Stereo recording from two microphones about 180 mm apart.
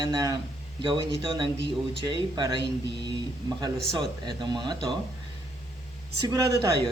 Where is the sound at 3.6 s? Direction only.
25° right (ahead or behind).